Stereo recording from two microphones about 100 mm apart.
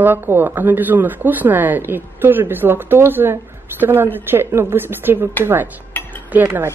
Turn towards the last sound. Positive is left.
turn(degrees=-15)  # may be behind; listen again after turning